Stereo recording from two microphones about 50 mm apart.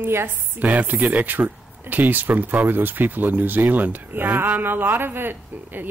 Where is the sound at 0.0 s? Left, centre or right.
Right.